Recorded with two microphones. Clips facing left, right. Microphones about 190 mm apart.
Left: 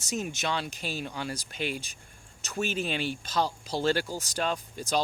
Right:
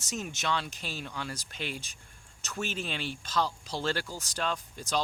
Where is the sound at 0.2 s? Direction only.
10° left (ahead or behind).